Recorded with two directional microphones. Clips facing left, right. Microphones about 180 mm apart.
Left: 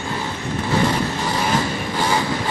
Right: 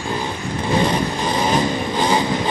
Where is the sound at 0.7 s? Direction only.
20° right (ahead or behind).